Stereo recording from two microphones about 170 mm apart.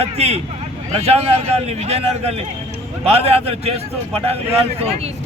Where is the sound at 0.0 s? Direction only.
40° right (ahead or behind).